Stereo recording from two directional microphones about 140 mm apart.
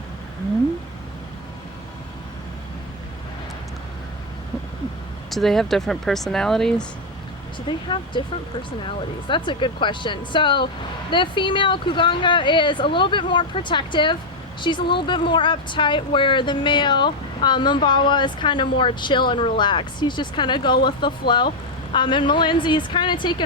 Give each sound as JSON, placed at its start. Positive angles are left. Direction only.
{"t": 5.3, "sound": "speech", "side_deg": 0}
{"t": 7.7, "sound": "speech", "side_deg": 35}